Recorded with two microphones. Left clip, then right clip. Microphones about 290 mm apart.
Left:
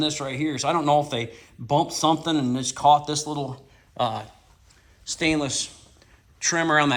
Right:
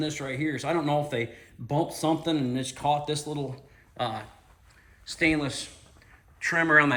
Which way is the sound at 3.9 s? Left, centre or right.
Centre.